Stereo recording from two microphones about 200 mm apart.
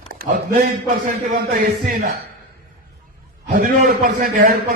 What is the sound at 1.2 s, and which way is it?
Speech, 45° right (ahead or behind).